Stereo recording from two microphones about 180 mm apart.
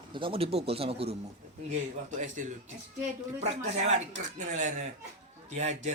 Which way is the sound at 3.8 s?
40° right (ahead or behind).